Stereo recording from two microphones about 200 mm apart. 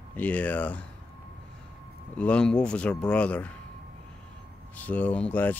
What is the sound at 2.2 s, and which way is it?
Speech, 5° left (ahead or behind).